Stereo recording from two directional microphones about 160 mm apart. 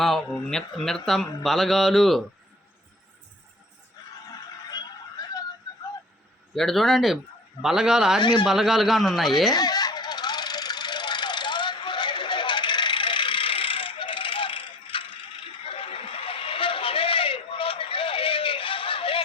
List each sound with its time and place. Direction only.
0.4 s speech: 5° left (ahead or behind)
6.5 s speech: centre (ahead or behind)
8.2 s speech: 30° left (ahead or behind)
8.4 s speech: centre (ahead or behind)
9.5 s vehicle: 25° left (ahead or behind)
15.6 s a sound: 35° left (ahead or behind)